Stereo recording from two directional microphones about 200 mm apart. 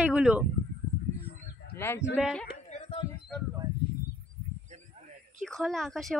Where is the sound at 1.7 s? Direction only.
10° left (ahead or behind).